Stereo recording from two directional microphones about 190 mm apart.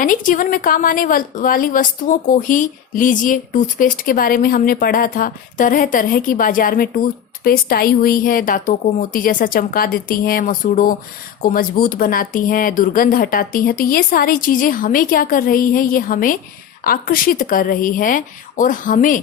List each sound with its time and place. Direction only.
0.0 s speech: 45° left (ahead or behind)